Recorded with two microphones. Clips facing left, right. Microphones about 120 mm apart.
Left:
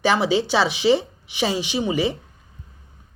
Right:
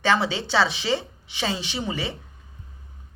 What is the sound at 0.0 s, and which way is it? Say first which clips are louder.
Speech: left 4 dB; 15° left (ahead or behind).